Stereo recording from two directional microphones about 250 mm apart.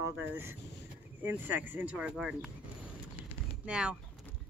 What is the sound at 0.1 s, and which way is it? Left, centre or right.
Speech, centre.